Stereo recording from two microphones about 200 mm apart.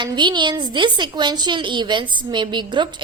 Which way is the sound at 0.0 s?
25° right (ahead or behind).